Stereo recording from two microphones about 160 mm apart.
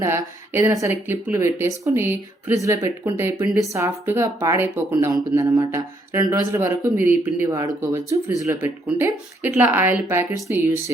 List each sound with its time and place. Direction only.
0.0 s speech: 15° right (ahead or behind)